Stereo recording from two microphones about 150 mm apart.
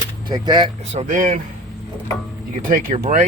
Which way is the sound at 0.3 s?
30° right (ahead or behind).